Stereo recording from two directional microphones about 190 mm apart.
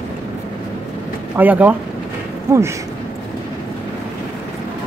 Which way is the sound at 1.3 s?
10° right (ahead or behind).